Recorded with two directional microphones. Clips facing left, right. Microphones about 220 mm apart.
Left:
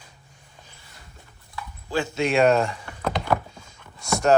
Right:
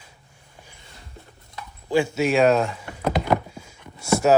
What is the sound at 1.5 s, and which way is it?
Speech, 15° right (ahead or behind).